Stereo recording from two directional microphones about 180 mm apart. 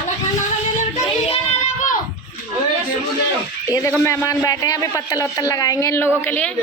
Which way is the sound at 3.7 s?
20° left (ahead or behind).